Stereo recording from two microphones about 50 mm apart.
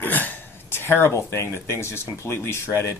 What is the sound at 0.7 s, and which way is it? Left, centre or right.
Speech, left.